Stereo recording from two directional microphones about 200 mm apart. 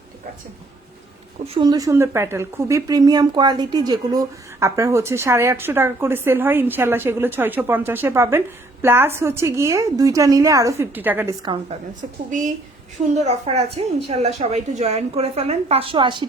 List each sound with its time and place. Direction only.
1.5 s speech: 20° right (ahead or behind)
11.4 s a woman's voice: 25° right (ahead or behind)
13.1 s a woman's voice: 35° right (ahead or behind)